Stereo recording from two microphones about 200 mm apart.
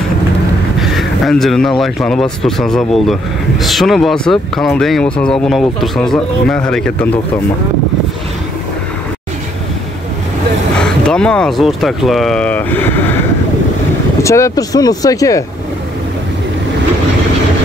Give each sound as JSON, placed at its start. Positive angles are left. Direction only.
{"t": 0.7, "sound": "speech", "side_deg": 0}
{"t": 10.8, "sound": "speech", "side_deg": 5}
{"t": 14.2, "sound": "speech", "side_deg": 15}